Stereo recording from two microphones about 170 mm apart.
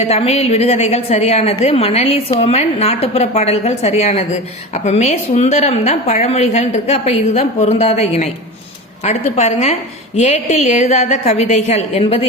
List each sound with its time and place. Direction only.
0.0 s a woman's voice: 35° left (ahead or behind)